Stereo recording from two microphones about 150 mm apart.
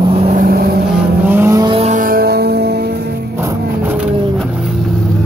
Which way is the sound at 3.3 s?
15° right (ahead or behind).